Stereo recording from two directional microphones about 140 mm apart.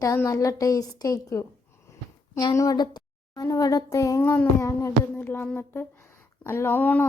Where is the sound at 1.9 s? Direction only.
20° left (ahead or behind).